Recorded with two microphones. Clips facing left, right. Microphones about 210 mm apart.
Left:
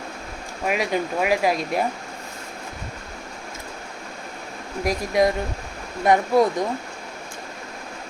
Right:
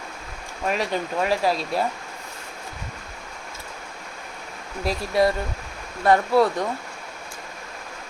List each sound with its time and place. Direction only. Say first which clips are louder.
0.7 s speech: left 2 dB; 10° left (ahead or behind)
4.8 s speech: left 1 dB; 15° left (ahead or behind)